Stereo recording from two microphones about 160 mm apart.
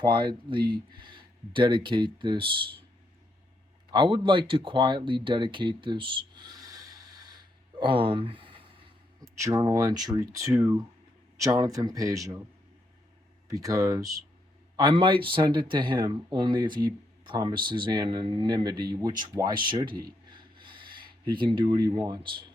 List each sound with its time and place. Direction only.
0.0 s speech: 30° right (ahead or behind)
3.9 s speech: 30° right (ahead or behind)
9.2 s speech: 20° right (ahead or behind)
13.5 s speech: 20° right (ahead or behind)
14.8 s speech: 30° right (ahead or behind)
20.3 s rub: 30° right (ahead or behind)
21.2 s speech: 30° right (ahead or behind)